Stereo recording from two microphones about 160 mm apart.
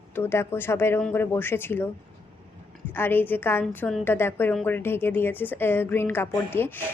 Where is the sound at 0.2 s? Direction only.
15° left (ahead or behind).